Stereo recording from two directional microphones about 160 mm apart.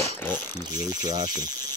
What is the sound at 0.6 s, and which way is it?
Mechanisms, 25° right (ahead or behind).